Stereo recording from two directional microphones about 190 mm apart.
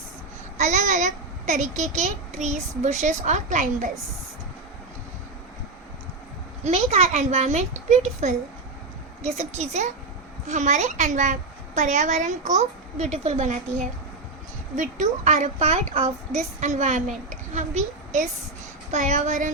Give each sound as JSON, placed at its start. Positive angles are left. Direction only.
{"t": 0.5, "sound": "a woman's voice", "side_deg": -35}
{"t": 6.7, "sound": "a woman's voice", "side_deg": -35}
{"t": 14.8, "sound": "a woman's voice", "side_deg": -40}